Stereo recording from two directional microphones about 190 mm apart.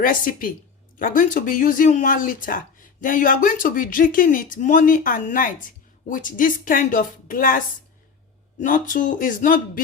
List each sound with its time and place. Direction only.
0.0 s speech: 50° left (ahead or behind)
8.6 s speech: 45° left (ahead or behind)